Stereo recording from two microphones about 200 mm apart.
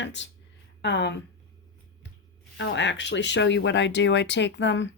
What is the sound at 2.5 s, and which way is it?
A woman's voice, 65° left (ahead or behind).